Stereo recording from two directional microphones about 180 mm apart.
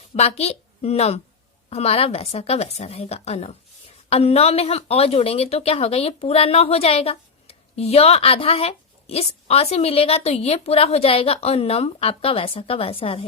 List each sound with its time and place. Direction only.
0.1 s a woman's voice: 35° left (ahead or behind)